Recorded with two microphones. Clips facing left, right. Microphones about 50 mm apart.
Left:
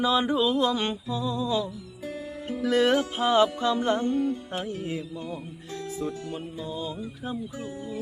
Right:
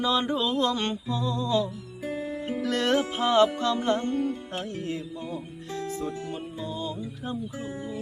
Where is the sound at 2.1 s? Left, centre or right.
Right.